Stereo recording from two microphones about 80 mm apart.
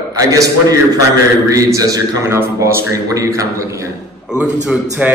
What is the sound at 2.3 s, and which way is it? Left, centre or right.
Speech, right.